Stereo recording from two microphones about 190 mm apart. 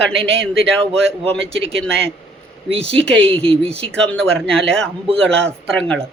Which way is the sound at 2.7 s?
30° right (ahead or behind).